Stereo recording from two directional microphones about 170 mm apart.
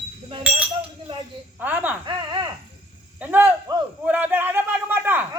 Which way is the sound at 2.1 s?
30° right (ahead or behind).